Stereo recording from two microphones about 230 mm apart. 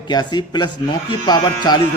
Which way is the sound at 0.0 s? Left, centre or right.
Centre.